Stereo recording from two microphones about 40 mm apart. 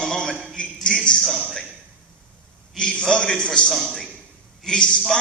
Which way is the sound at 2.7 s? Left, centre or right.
Centre.